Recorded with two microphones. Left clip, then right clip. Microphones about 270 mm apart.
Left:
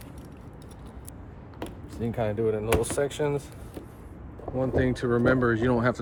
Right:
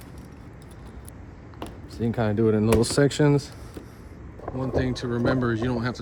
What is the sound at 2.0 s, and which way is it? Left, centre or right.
Speech, right.